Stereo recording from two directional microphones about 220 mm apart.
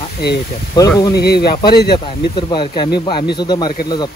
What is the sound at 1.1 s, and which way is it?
Speech, 45° left (ahead or behind).